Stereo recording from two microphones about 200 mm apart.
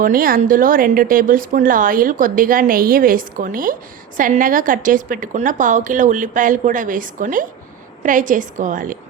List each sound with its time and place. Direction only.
0.0 s a woman's voice: 45° right (ahead or behind)